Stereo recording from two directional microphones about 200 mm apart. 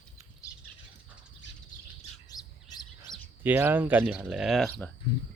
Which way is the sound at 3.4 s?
10° right (ahead or behind).